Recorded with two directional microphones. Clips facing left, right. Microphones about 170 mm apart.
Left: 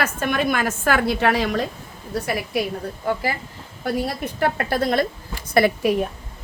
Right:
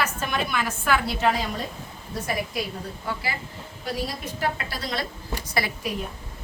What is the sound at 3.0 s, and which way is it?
A woman's voice, 50° left (ahead or behind).